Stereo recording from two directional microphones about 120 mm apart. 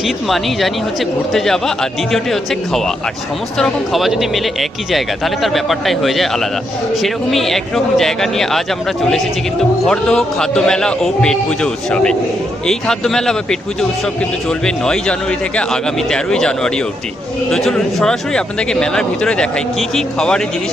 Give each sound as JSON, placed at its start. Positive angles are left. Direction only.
{"t": 0.3, "sound": "speech", "side_deg": 0}
{"t": 9.8, "sound": "a man's voice", "side_deg": 5}